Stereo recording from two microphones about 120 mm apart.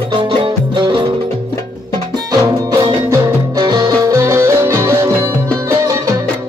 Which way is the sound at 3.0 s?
30° right (ahead or behind).